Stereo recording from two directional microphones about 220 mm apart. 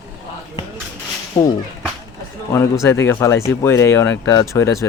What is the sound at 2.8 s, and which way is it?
Speech, 10° left (ahead or behind).